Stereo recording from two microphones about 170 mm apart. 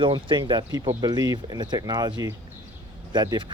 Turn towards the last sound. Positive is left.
turn(degrees=-25)  # may be behind; listen again after turning